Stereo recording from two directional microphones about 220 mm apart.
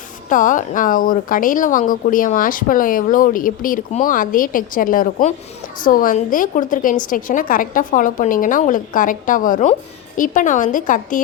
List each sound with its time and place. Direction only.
0.3 s speech: 35° left (ahead or behind)